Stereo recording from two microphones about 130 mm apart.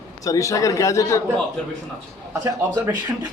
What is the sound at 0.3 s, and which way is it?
Speech, 25° left (ahead or behind).